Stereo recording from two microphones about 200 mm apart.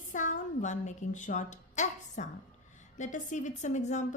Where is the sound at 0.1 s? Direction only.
40° left (ahead or behind).